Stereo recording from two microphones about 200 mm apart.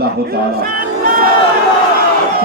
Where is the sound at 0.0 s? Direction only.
50° right (ahead or behind).